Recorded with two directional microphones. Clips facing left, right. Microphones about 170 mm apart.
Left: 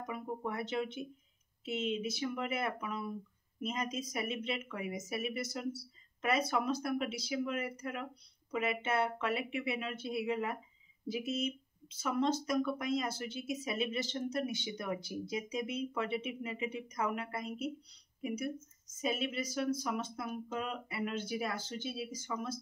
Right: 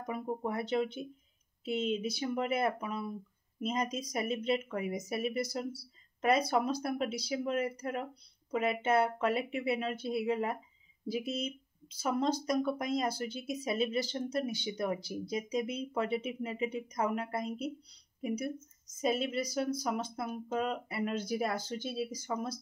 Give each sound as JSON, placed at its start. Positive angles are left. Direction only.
{"t": 0.0, "sound": "speech", "side_deg": -35}